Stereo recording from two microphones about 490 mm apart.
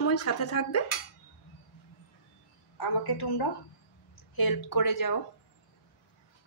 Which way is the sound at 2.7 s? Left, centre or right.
Left.